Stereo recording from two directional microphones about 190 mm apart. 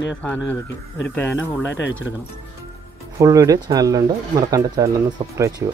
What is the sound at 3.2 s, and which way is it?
Speech, 20° right (ahead or behind).